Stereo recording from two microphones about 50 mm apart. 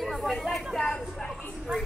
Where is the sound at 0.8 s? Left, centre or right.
Centre.